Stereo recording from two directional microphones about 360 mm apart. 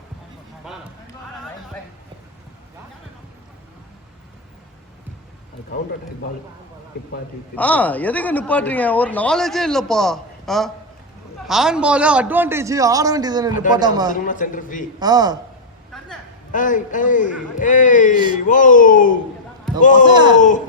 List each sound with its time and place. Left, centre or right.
7.5 s speech: centre
13.5 s a man's voice: left
13.7 s a man's voice: centre
14.1 s a man's voice: left
14.9 s a man's voice: centre
16.5 s a man's voice: left